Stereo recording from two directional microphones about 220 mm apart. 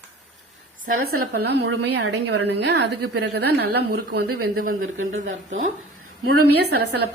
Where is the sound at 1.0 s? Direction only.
80° right.